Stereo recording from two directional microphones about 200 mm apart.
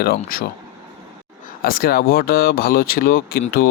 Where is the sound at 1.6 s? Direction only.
50° left (ahead or behind).